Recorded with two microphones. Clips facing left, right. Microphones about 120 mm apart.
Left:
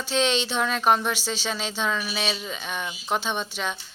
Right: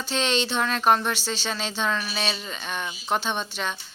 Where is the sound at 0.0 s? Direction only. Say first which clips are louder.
Left 1 dB; centre (ahead or behind).